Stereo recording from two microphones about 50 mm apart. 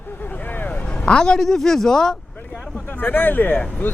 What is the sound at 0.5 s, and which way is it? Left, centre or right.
Vehicle, left.